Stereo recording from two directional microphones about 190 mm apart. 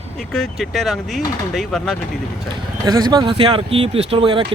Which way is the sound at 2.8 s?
20° right (ahead or behind).